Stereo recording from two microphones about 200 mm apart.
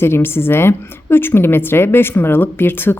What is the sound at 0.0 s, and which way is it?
A woman's voice, 10° left (ahead or behind).